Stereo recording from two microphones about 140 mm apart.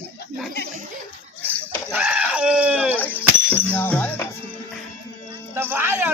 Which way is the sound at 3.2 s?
15° left (ahead or behind).